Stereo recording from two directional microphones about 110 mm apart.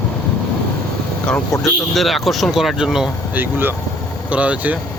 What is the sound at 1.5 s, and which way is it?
Speech, centre (ahead or behind).